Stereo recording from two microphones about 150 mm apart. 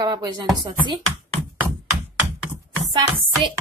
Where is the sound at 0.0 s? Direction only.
25° right (ahead or behind).